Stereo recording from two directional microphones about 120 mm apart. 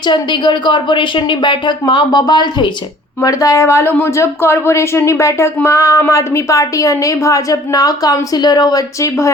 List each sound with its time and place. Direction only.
0.0 s a woman's voice: 40° left (ahead or behind); by 9.3 s 25° left (ahead or behind)